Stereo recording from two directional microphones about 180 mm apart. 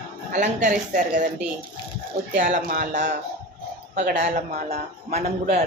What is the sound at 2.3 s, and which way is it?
Speech, 45° right (ahead or behind).